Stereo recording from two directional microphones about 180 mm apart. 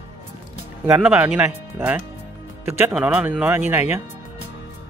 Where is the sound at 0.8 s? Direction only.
10° right (ahead or behind).